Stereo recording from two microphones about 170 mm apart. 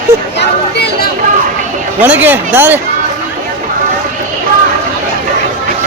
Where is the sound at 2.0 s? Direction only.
10° right (ahead or behind).